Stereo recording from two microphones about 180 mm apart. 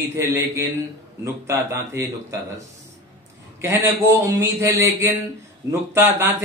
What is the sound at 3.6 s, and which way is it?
Speech, 15° right (ahead or behind).